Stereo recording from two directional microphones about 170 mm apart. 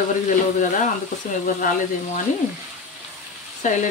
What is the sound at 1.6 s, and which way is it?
Speech, 50° left (ahead or behind).